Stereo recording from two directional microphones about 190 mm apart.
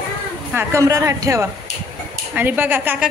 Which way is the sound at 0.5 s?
15° right (ahead or behind).